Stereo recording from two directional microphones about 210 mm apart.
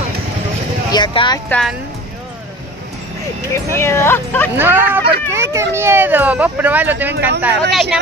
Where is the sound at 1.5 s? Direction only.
Centre (ahead or behind).